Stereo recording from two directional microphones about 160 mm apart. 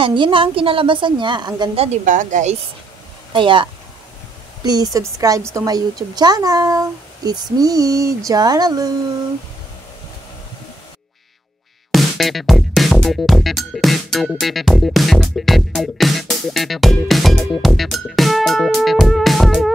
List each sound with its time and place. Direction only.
0.0 s a woman's voice: 30° right (ahead or behind)
1.8 s speech: 50° right (ahead or behind)
3.3 s a woman's voice: 30° right (ahead or behind)
4.6 s speech: 25° right (ahead or behind)
11.9 s music: centre (ahead or behind)